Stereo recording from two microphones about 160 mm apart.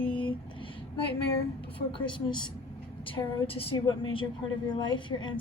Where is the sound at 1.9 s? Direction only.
30° left (ahead or behind).